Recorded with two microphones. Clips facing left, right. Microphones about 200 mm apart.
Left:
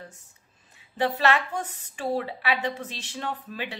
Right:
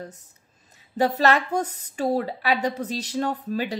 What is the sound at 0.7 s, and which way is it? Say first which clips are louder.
A woman's voice: right 4 dB; 40° right (ahead or behind).